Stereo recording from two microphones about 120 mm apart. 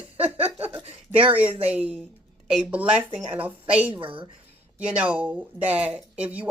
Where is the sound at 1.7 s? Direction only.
10° right (ahead or behind).